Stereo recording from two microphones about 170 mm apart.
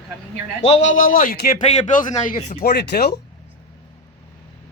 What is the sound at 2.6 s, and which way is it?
Speech, 75° left (ahead or behind).